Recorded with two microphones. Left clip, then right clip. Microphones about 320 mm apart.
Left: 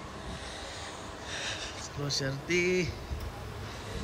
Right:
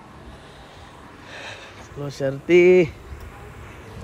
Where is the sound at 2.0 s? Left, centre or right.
Centre.